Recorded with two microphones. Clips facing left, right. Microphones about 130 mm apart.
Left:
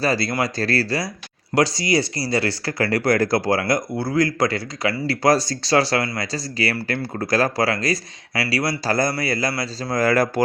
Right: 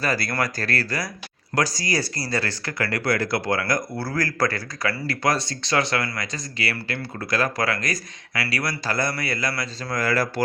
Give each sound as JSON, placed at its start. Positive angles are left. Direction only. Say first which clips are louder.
{"t": 0.0, "sound": "speech", "louder": "left 4 dB", "side_deg": 30}
{"t": 3.6, "sound": "speech", "louder": "left 4 dB", "side_deg": 20}
{"t": 5.2, "sound": "speech", "louder": "left 6 dB", "side_deg": 40}
{"t": 10.1, "sound": "speech", "louder": "left 5 dB", "side_deg": 50}